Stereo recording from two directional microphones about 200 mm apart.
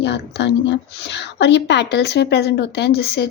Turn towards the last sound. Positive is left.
turn(degrees=55)  # may be behind; listen again after turning